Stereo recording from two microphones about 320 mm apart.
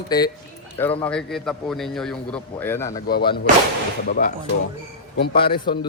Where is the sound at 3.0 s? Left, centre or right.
Left.